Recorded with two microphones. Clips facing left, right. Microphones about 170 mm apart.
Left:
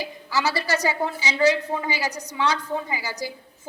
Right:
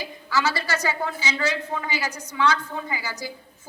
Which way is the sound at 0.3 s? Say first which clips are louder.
Left 1 dB; 35° left (ahead or behind).